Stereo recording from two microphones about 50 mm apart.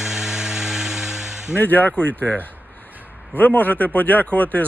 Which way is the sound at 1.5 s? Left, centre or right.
Left.